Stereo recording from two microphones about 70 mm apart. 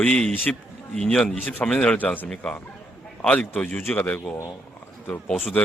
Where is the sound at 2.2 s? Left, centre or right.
Centre.